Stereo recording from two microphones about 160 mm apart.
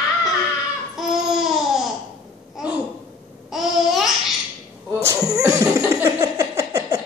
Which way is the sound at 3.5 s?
Centre (ahead or behind).